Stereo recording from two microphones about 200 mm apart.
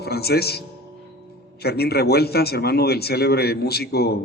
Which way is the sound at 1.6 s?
55° left (ahead or behind).